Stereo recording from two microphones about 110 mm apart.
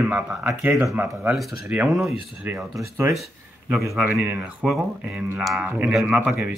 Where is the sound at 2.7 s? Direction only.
25° right (ahead or behind).